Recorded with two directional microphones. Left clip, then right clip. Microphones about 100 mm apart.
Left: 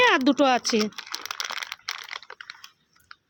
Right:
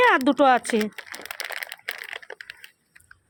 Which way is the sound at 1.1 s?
10° left (ahead or behind).